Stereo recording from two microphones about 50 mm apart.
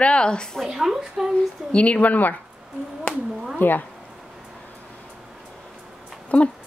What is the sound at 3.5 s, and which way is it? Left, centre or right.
Speech, left.